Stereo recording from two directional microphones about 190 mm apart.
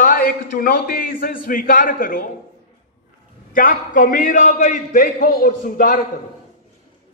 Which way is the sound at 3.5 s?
45° left (ahead or behind).